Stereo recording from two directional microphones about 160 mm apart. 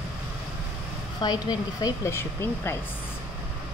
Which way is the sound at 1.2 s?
25° left (ahead or behind).